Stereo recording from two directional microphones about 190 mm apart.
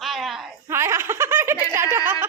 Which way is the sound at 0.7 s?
15° right (ahead or behind).